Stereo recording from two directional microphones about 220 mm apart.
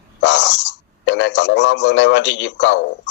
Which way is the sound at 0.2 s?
55° left (ahead or behind).